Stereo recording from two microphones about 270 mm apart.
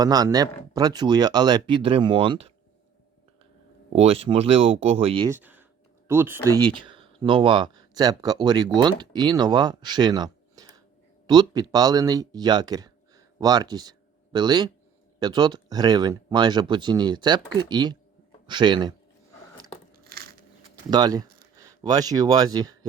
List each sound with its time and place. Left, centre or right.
0.0 s speech: centre
3.9 s speech: right
19.9 s a sound: right
20.9 s speech: centre